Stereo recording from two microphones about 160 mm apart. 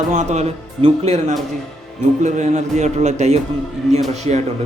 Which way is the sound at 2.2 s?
45° right (ahead or behind).